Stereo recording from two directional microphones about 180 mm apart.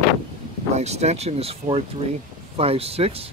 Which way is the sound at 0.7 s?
35° right (ahead or behind).